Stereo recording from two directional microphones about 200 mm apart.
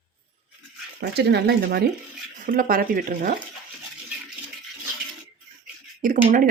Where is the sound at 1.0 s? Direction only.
55° right (ahead or behind).